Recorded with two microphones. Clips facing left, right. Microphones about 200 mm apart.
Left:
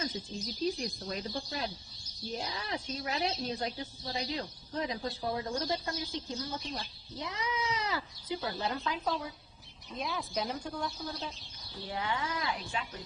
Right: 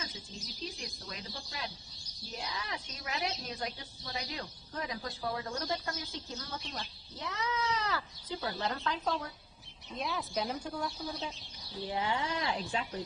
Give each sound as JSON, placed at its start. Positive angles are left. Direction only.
{"t": 0.8, "sound": "a woman's voice", "side_deg": 35}
{"t": 11.8, "sound": "speech", "side_deg": -20}